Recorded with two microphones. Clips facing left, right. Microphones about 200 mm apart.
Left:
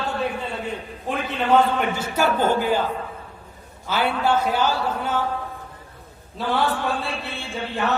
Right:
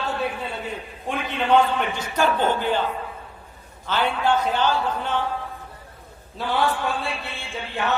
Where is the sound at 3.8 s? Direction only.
10° left (ahead or behind).